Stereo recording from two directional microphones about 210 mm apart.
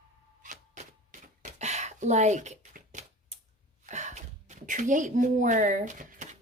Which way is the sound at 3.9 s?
35° right (ahead or behind).